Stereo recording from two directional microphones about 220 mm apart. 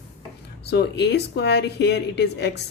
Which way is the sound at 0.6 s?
50° left (ahead or behind).